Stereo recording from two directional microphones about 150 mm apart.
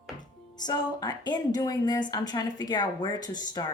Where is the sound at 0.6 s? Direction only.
25° left (ahead or behind).